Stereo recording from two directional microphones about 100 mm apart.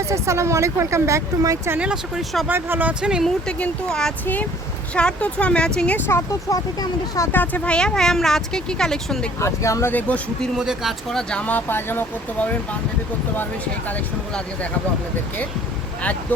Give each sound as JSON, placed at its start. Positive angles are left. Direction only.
{"t": 0.0, "sound": "speech", "side_deg": -30}
{"t": 1.8, "sound": "speech", "side_deg": -10}
{"t": 2.5, "sound": "speech", "side_deg": -20}
{"t": 3.0, "sound": "speech", "side_deg": -5}
{"t": 3.2, "sound": "speech", "side_deg": 5}
{"t": 6.5, "sound": "speech", "side_deg": 35}
{"t": 7.3, "sound": "speech", "side_deg": 15}
{"t": 9.4, "sound": "speech", "side_deg": 30}
{"t": 9.9, "sound": "speech", "side_deg": 15}
{"t": 10.6, "sound": "speech", "side_deg": -5}
{"t": 11.1, "sound": "speech", "side_deg": 5}